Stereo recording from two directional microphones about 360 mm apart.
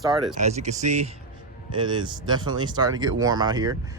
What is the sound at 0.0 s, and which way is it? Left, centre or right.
Speech, centre.